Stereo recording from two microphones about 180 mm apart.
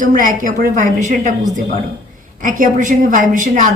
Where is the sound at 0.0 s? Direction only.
45° right (ahead or behind).